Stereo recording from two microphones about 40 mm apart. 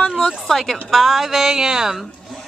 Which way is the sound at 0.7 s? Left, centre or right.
Centre.